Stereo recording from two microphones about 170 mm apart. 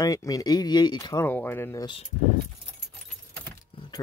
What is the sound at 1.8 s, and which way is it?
Speech, 30° left (ahead or behind).